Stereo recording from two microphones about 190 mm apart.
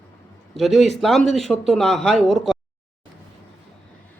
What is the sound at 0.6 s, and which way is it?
Speech, centre (ahead or behind).